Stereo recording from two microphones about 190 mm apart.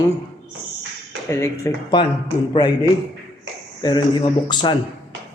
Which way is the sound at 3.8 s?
25° left (ahead or behind).